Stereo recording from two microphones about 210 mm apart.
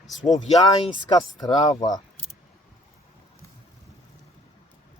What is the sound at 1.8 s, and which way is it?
Speech, 20° left (ahead or behind).